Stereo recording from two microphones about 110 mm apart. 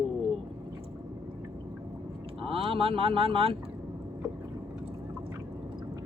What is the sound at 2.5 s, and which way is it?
Speech, 55° right (ahead or behind).